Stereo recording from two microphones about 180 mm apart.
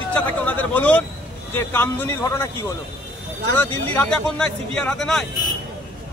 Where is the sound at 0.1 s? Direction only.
10° left (ahead or behind).